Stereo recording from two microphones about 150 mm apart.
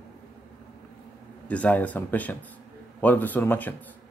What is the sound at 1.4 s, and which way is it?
Speech, 10° left (ahead or behind).